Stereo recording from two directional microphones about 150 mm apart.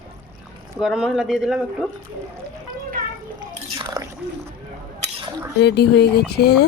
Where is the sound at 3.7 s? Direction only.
25° right (ahead or behind).